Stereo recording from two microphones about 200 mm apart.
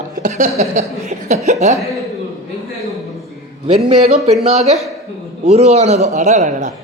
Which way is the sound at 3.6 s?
30° right (ahead or behind).